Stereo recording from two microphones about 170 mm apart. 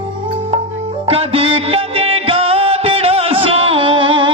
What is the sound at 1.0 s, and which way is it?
Music, 35° right (ahead or behind).